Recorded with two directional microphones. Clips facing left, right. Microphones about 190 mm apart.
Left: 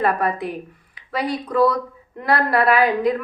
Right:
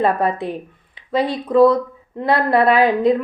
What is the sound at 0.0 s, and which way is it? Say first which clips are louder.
A woman's voice: right 3 dB; 25° right (ahead or behind).